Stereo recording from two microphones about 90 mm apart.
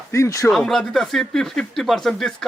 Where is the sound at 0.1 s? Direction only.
35° left (ahead or behind).